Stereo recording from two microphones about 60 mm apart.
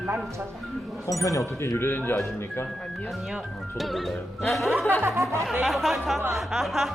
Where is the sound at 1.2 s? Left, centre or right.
Left.